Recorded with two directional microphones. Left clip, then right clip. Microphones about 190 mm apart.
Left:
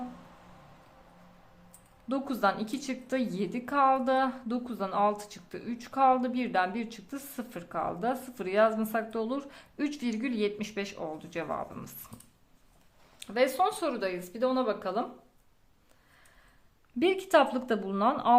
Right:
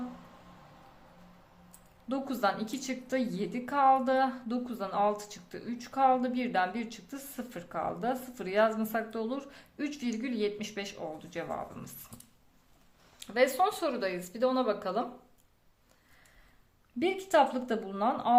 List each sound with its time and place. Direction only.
2.0 s a woman's voice: 15° left (ahead or behind)
13.1 s a woman's voice: 10° left (ahead or behind)
17.0 s a woman's voice: 20° left (ahead or behind)